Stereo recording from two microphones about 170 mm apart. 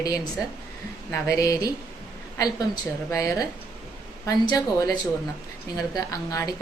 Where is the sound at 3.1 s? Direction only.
20° left (ahead or behind).